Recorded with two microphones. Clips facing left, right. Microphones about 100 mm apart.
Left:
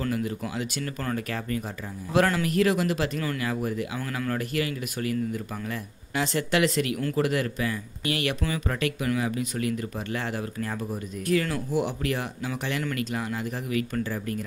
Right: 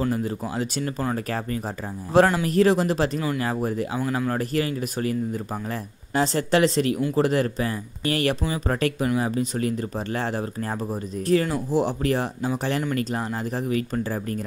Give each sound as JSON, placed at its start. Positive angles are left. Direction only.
{"t": 0.1, "sound": "speech", "side_deg": -35}
{"t": 4.0, "sound": "speech", "side_deg": -25}